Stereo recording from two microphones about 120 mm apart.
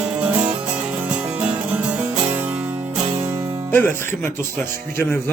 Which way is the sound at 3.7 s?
20° left (ahead or behind).